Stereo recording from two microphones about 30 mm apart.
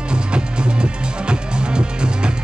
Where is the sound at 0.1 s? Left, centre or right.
Right.